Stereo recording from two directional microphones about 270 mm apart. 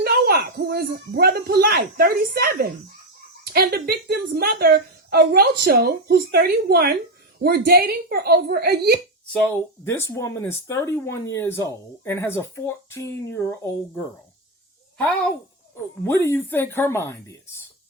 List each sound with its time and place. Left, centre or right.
0.0 s a woman's voice: right
9.8 s speech: centre
16.0 s speech: centre